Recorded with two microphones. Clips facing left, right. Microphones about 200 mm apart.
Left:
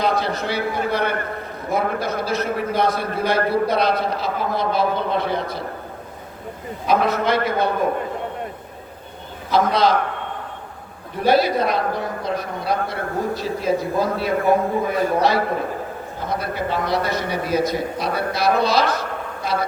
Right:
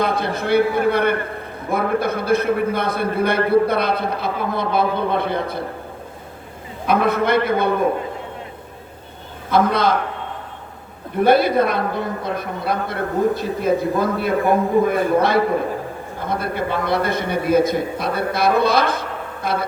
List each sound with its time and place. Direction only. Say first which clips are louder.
0.0 s a man's voice: right 1 dB; 55° right (ahead or behind)
6.8 s a man's voice: right 1 dB; 55° right (ahead or behind)
9.5 s a man's voice: right 1 dB; 55° right (ahead or behind)
11.2 s a man's voice: right 3 dB; 55° right (ahead or behind)